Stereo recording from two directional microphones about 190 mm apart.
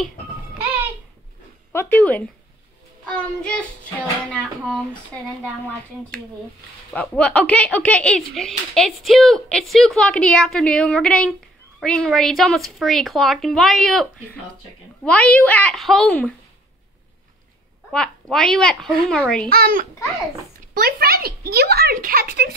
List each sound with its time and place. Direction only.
1.7 s a woman's voice: 10° left (ahead or behind)
6.9 s speech: 5° left (ahead or behind)
15.0 s a woman's voice: 5° left (ahead or behind)
17.9 s speech: 5° left (ahead or behind)
19.5 s speech: 50° right (ahead or behind)